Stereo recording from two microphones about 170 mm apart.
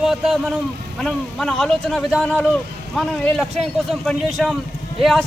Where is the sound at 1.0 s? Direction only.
5° left (ahead or behind).